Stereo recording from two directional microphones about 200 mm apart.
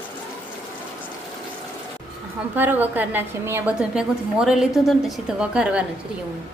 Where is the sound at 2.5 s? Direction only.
10° right (ahead or behind).